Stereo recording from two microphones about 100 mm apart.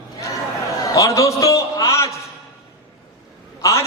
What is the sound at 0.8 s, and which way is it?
A man's voice, 35° left (ahead or behind).